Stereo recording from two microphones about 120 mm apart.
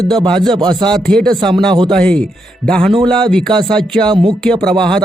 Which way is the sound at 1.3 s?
40° right (ahead or behind).